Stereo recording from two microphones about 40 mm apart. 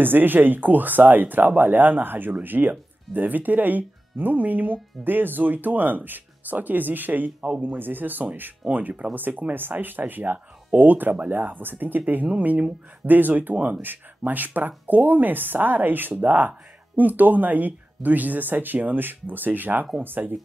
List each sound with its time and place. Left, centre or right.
0.0 s a woman's voice: right
12.4 s speech: right
13.1 s a woman's voice: right